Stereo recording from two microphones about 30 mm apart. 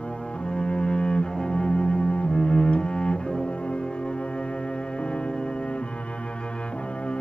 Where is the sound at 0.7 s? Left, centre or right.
Left.